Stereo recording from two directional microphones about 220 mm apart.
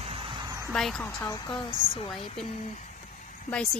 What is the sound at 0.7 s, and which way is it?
A woman's voice, centre (ahead or behind).